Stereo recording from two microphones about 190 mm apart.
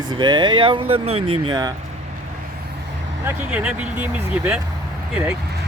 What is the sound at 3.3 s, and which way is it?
Speech, 5° right (ahead or behind).